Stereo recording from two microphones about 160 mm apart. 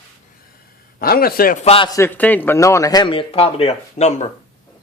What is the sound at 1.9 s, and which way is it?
Speech, 15° left (ahead or behind).